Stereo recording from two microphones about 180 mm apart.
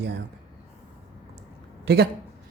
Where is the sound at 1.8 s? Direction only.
65° right (ahead or behind).